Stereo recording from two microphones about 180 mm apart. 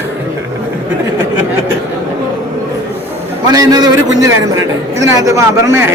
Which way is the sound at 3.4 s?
20° right (ahead or behind).